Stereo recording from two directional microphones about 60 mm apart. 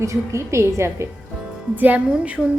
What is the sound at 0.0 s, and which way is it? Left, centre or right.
A woman's voice, right.